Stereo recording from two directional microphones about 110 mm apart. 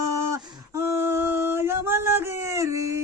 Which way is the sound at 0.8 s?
25° right (ahead or behind).